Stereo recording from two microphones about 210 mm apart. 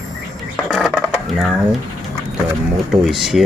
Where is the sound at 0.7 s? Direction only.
Centre (ahead or behind).